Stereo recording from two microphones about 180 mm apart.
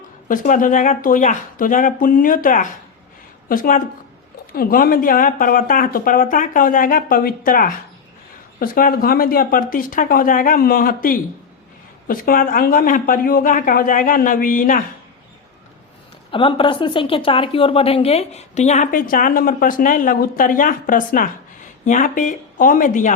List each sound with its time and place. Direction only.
0.3 s a woman's voice: 45° left (ahead or behind)
16.3 s a woman's voice: 30° left (ahead or behind); by 23.1 s 45° left (ahead or behind)